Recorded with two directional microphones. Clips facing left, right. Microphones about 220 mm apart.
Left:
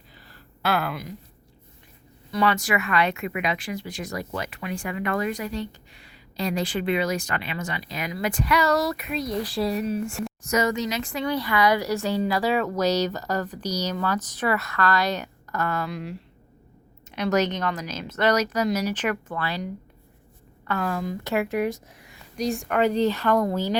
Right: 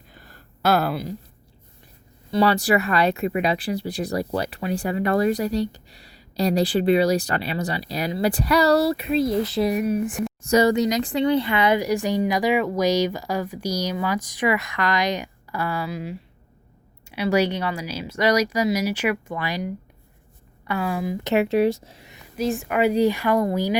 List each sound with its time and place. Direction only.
0.1 s a sound: 50° right (ahead or behind)
2.3 s speech: 35° right (ahead or behind); by 10.2 s 15° right (ahead or behind)
10.4 s speech: 30° right (ahead or behind)
11.8 s speech: 15° right (ahead or behind)
20.7 s speech: 10° right (ahead or behind)
21.3 s speech: 25° right (ahead or behind)
22.4 s speech: centre (ahead or behind)